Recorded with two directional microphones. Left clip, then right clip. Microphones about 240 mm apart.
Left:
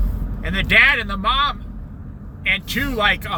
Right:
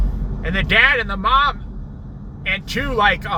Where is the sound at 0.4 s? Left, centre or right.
Centre.